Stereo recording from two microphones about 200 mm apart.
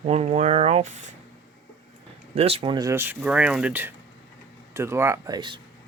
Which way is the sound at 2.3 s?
30° right (ahead or behind).